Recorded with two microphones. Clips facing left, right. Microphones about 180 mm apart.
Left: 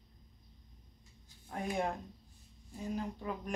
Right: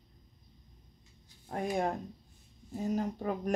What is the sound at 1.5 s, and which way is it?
Speech, 40° right (ahead or behind).